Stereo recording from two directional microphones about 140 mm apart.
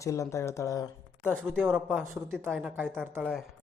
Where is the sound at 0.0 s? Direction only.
20° left (ahead or behind).